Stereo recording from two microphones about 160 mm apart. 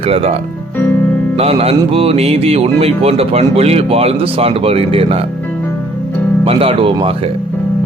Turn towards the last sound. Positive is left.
turn(degrees=-35)  # may be behind; listen again after turning